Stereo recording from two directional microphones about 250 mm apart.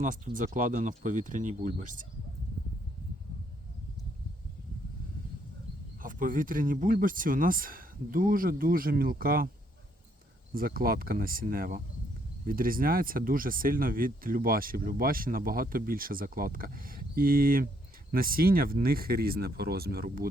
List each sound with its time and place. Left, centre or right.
0.0 s speech: right
6.0 s speech: right
10.5 s speech: right